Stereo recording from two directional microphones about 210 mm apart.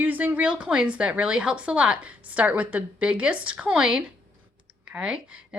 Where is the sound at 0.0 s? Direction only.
10° right (ahead or behind).